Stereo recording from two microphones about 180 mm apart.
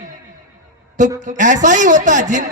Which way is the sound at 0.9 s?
45° right (ahead or behind).